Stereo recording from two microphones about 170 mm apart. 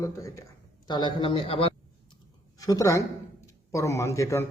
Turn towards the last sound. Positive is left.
turn(degrees=15)  # may be behind; listen again after turning